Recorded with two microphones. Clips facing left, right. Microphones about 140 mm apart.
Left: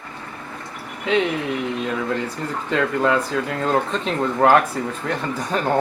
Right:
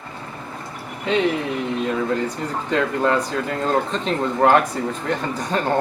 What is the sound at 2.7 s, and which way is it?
Speech, centre (ahead or behind).